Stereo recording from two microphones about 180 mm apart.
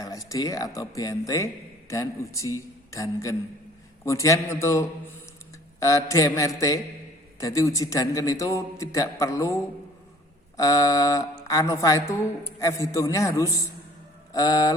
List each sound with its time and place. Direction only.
0.0 s a man's voice: 20° left (ahead or behind)
10.6 s a man's voice: 20° left (ahead or behind)